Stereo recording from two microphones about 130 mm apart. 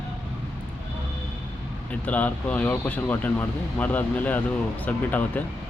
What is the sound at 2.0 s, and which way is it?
Speech, 10° left (ahead or behind).